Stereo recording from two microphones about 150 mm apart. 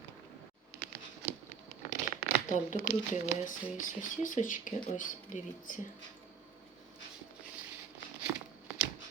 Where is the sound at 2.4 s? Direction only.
55° left (ahead or behind).